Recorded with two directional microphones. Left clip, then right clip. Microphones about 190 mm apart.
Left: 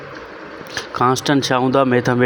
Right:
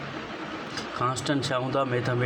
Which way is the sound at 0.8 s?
40° left (ahead or behind).